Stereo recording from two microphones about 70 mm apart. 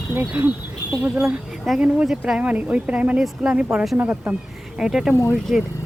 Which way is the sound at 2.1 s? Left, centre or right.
Centre.